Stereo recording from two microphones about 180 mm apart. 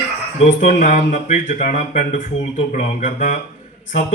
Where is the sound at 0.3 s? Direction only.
40° left (ahead or behind).